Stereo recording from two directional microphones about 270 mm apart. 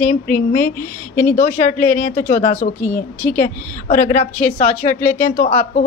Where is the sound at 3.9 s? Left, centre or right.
Left.